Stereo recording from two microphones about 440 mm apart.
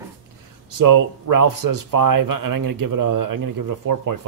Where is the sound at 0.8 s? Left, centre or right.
Right.